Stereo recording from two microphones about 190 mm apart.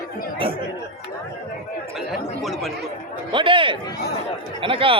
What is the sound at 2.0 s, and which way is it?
Speech, centre (ahead or behind).